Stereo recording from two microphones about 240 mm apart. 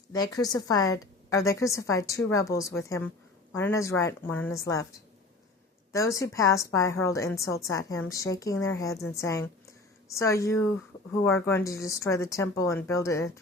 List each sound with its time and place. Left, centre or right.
0.1 s a woman's voice: centre
5.9 s a woman's voice: centre